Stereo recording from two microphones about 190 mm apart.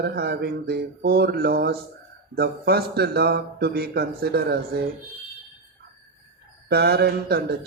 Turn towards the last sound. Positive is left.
turn(degrees=-55)  # may be behind; listen again after turning